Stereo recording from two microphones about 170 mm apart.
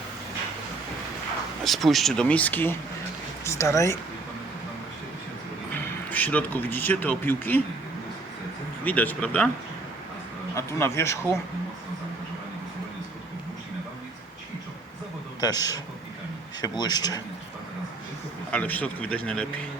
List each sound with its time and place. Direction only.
1.6 s speech: centre (ahead or behind); by 3.9 s 15° left (ahead or behind)
5.7 s speech: 10° left (ahead or behind)
8.8 s speech: 10° left (ahead or behind)
10.5 s speech: 15° left (ahead or behind)
15.4 s speech: 20° left (ahead or behind)
18.5 s speech: 10° left (ahead or behind)